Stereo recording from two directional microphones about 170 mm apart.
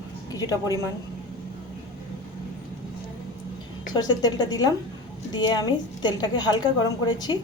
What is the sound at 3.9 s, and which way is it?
A woman's voice, 25° left (ahead or behind).